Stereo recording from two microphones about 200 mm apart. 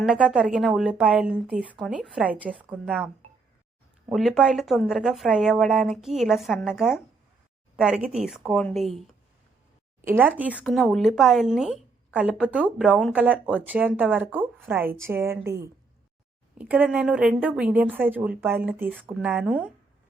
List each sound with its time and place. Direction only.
0.0 s speech: 5° right (ahead or behind)
4.1 s speech: centre (ahead or behind)
10.0 s a woman's voice: 10° right (ahead or behind)
16.6 s a woman's voice: 10° right (ahead or behind)